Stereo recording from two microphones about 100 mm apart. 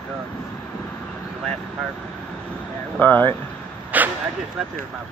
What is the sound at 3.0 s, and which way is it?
Speech, 20° left (ahead or behind).